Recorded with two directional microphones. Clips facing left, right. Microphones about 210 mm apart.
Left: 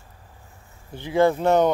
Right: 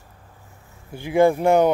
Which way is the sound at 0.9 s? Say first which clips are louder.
Right 2 dB; 10° right (ahead or behind).